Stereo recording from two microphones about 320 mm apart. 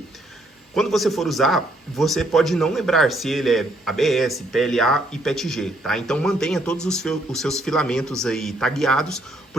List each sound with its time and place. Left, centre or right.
0.8 s speech: centre